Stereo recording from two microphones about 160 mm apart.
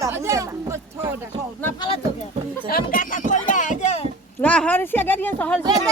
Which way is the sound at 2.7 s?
65° left (ahead or behind).